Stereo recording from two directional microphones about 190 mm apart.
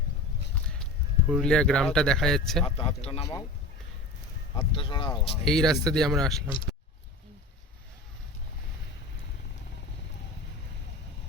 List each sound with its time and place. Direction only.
1.3 s speech: 5° left (ahead or behind)
2.6 s speech: 30° left (ahead or behind)
4.5 s speech: 30° left (ahead or behind)
5.5 s speech: 5° left (ahead or behind)